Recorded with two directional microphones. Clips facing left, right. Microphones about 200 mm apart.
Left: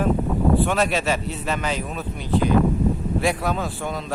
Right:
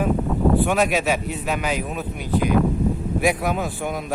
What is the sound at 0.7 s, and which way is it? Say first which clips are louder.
Speech: right 2 dB; 15° right (ahead or behind).